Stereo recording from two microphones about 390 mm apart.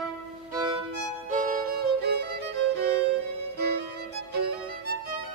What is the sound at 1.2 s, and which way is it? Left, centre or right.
Music, centre.